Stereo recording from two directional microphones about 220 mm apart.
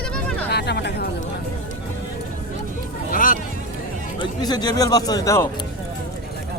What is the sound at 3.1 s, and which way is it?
Vehicle, 40° left (ahead or behind).